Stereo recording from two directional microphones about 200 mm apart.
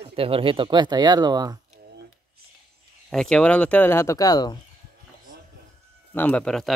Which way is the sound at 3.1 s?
5° left (ahead or behind).